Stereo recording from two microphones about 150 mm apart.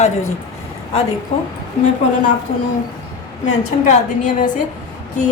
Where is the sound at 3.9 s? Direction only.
55° left (ahead or behind).